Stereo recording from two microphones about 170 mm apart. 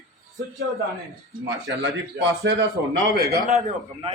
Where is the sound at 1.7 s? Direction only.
90° right.